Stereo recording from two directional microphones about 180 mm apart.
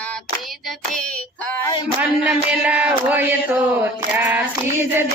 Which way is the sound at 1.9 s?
5° right (ahead or behind).